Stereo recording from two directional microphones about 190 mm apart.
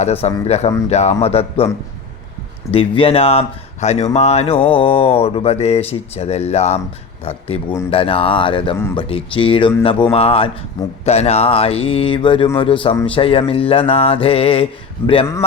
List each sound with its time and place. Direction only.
0.0 s speech: 35° left (ahead or behind)
2.7 s speech: 30° left (ahead or behind)